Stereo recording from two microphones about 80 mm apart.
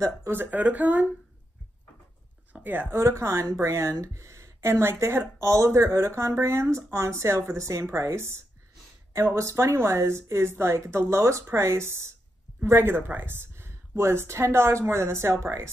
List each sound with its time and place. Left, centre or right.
0.3 s speech: right
2.5 s speech: right
3.0 s speech: right